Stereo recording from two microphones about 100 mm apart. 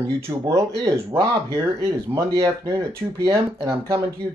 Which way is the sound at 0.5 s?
30° right (ahead or behind).